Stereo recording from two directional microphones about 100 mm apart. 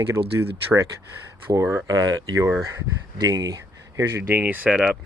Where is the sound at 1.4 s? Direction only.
25° right (ahead or behind).